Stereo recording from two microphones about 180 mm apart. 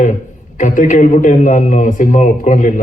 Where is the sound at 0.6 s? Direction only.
45° left (ahead or behind).